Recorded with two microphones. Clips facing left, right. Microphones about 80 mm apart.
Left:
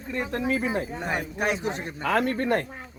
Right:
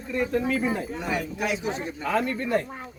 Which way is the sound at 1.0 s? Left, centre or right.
Left.